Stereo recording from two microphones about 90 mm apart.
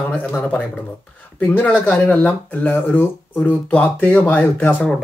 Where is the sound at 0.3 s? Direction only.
15° left (ahead or behind).